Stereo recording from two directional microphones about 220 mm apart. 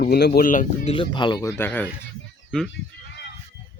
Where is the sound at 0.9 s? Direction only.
20° left (ahead or behind).